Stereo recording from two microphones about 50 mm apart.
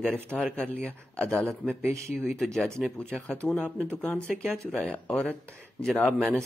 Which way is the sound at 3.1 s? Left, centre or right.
Left.